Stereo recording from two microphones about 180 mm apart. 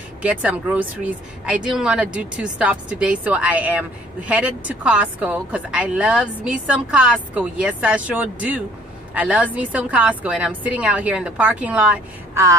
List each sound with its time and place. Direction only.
0.2 s a woman's voice: 5° right (ahead or behind)